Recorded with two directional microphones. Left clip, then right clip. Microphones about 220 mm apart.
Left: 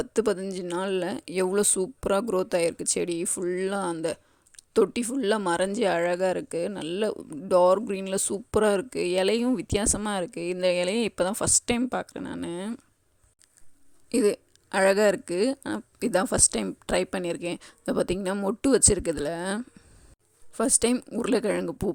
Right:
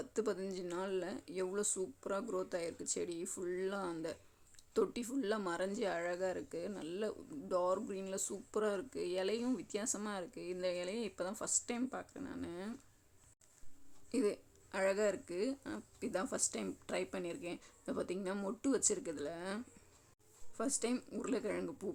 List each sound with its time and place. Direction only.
0.0 s speech: 40° left (ahead or behind)
14.1 s speech: 40° left (ahead or behind)